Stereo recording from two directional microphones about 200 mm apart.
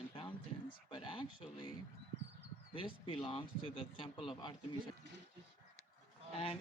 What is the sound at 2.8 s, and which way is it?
Speech, 25° left (ahead or behind).